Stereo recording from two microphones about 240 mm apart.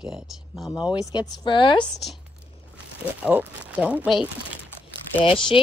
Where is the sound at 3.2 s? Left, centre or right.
Centre.